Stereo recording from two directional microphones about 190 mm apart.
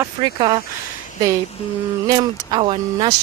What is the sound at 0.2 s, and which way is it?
Speech, 25° right (ahead or behind).